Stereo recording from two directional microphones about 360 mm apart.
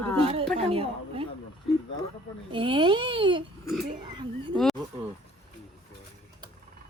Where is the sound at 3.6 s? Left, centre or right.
Centre.